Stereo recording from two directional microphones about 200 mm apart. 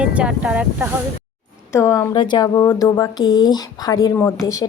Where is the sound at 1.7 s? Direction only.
15° left (ahead or behind).